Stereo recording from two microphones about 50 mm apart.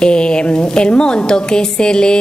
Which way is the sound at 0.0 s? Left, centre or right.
Centre.